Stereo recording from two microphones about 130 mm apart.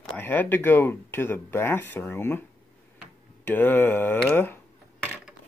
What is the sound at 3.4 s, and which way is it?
Speech, 15° left (ahead or behind).